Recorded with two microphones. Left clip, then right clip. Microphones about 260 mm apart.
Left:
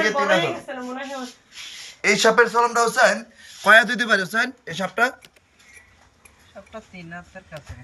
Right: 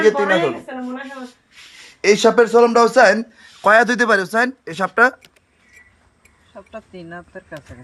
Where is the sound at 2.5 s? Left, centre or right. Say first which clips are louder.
Right 7 dB; right.